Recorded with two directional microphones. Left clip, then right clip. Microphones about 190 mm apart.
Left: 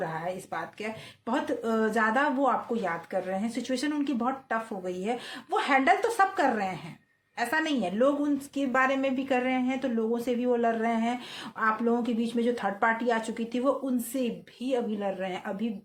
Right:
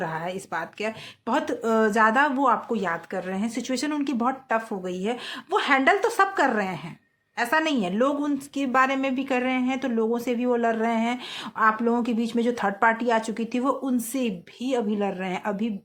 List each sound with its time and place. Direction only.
0.0 s a woman's voice: 35° right (ahead or behind)